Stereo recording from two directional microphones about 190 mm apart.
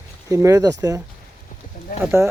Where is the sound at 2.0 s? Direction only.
15° right (ahead or behind).